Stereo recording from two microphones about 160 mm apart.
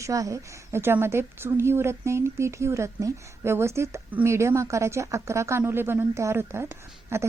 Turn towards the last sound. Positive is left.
turn(degrees=-15)  # may be behind; listen again after turning